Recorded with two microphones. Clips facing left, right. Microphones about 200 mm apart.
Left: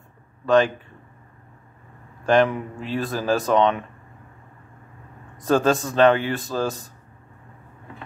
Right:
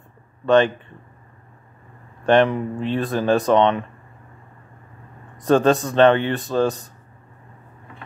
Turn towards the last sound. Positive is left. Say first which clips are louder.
# right 5 dB
turn(degrees=0)  # may be behind; listen again after turning